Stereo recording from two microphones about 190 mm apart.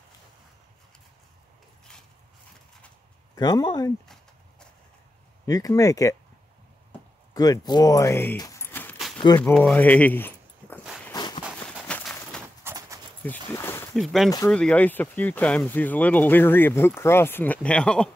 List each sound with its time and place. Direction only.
3.3 s speech: 20° left (ahead or behind)
5.5 s speech: 20° left (ahead or behind)
7.3 s speech: 20° left (ahead or behind)
11.1 s walk: 20° left (ahead or behind)
11.9 s a sound: 5° left (ahead or behind)
12.6 s clip-clop: 15° right (ahead or behind)
13.2 s speech: 10° left (ahead or behind)
13.9 s speech: centre (ahead or behind)